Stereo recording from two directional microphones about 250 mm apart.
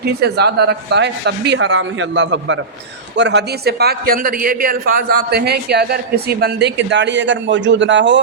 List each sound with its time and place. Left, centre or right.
0.0 s a man's voice: right